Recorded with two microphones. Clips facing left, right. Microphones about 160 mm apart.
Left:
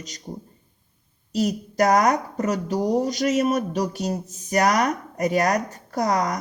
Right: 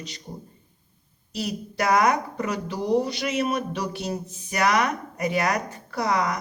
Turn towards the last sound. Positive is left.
turn(degrees=40)  # may be behind; listen again after turning